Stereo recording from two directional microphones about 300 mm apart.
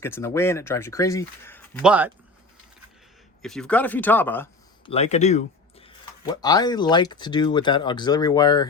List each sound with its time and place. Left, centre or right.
0.0 s speech: centre
1.9 s speech: centre
3.4 s speech: centre
4.9 s speech: left